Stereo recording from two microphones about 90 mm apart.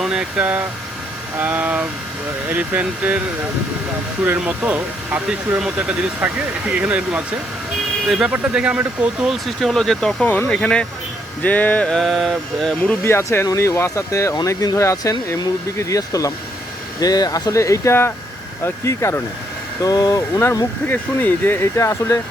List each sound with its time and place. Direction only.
0.0 s speech: 5° right (ahead or behind)
4.4 s speech: 15° right (ahead or behind)
8.0 s speech: 5° right (ahead or behind)
8.3 s speech: 15° right (ahead or behind)
9.2 s speech: centre (ahead or behind)
10.2 s a sound: 15° left (ahead or behind)
13.1 s speech: 30° left (ahead or behind); by 17.5 s 45° left (ahead or behind)
17.5 s speech: 35° left (ahead or behind)
19.8 s speech: 45° left (ahead or behind)
20.4 s speech: 30° left (ahead or behind)
20.8 s speech: 20° left (ahead or behind)